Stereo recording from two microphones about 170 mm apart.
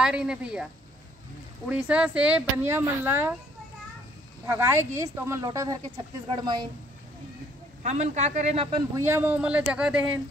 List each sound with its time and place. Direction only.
0.0 s a woman's voice: 5° right (ahead or behind)
1.7 s speech: 5° right (ahead or behind)
4.5 s speech: 15° right (ahead or behind)
7.8 s a man's voice: 45° right (ahead or behind)
8.9 s a woman's voice: 15° right (ahead or behind)